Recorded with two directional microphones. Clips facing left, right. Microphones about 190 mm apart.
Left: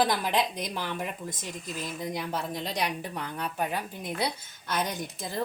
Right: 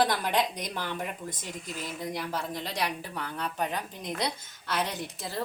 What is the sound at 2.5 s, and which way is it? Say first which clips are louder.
A woman's voice: left 1 dB; 20° left (ahead or behind).